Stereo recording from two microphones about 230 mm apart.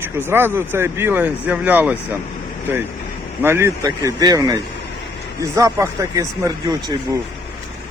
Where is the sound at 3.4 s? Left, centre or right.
Centre.